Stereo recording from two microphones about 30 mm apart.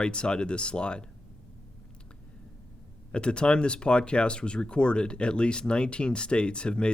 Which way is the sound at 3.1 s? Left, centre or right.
Left.